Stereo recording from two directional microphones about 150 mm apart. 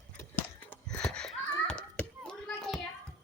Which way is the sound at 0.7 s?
5° left (ahead or behind).